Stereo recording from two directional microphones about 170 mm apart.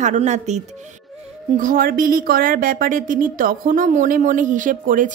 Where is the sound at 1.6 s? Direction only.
55° right (ahead or behind).